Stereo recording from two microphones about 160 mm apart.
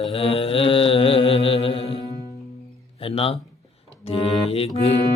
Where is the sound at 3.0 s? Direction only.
35° left (ahead or behind).